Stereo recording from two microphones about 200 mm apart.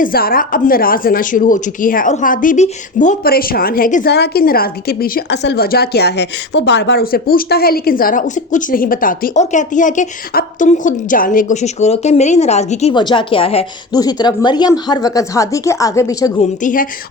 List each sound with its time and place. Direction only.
0.0 s speech: 45° left (ahead or behind)
12.9 s a woman's voice: 25° left (ahead or behind)
16.4 s speech: 40° left (ahead or behind)